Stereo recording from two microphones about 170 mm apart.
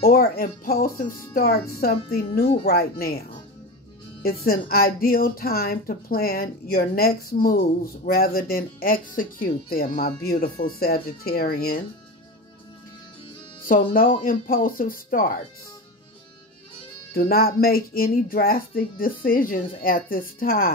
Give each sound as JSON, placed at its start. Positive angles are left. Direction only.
{"t": 0.0, "sound": "speech", "side_deg": 60}
{"t": 13.7, "sound": "speech", "side_deg": 55}
{"t": 17.1, "sound": "speech", "side_deg": 65}